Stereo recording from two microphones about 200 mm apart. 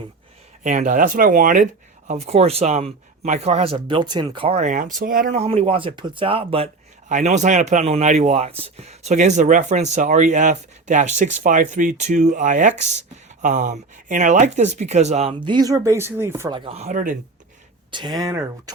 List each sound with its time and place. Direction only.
0.6 s speech: 40° right (ahead or behind)
2.0 s speech: 30° right (ahead or behind); by 16.6 s 10° right (ahead or behind)
16.6 s speech: 30° right (ahead or behind)
17.9 s speech: 20° right (ahead or behind)